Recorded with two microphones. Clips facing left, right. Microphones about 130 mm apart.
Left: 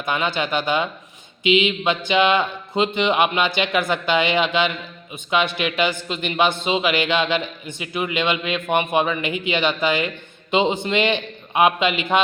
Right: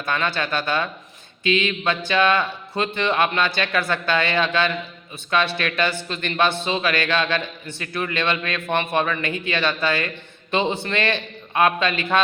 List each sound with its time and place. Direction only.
0.0 s a man's voice: 15° left (ahead or behind)